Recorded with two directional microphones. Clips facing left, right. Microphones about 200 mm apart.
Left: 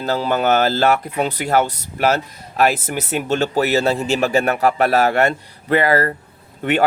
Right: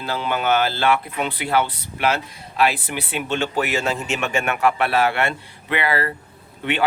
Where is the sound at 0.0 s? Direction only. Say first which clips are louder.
Left 5 dB; 40° left (ahead or behind).